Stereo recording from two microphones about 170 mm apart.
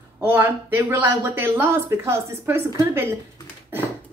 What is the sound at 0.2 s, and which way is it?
Speech, 10° right (ahead or behind).